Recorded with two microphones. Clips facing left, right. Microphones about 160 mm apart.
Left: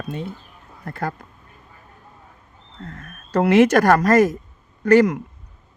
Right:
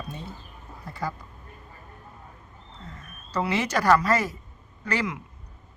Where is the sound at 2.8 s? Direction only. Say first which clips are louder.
Left 9 dB; 55° left (ahead or behind).